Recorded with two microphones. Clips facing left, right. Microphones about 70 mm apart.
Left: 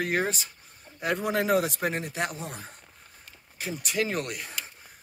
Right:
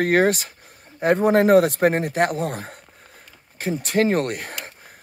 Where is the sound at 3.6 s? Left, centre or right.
Right.